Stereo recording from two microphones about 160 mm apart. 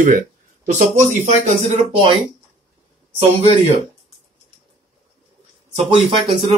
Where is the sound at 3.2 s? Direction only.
40° right (ahead or behind).